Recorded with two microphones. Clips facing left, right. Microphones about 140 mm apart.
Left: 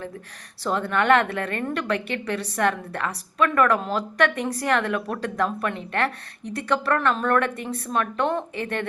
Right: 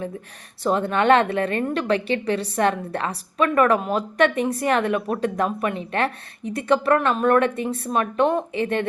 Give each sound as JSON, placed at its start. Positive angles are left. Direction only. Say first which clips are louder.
{"t": 0.6, "sound": "a woman's voice", "louder": "right 3 dB", "side_deg": -20}